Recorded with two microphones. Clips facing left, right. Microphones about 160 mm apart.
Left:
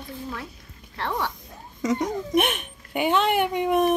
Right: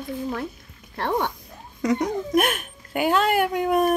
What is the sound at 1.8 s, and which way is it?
Speech, centre (ahead or behind).